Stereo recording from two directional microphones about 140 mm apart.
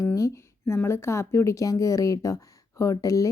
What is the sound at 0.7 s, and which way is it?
Speech, 20° left (ahead or behind).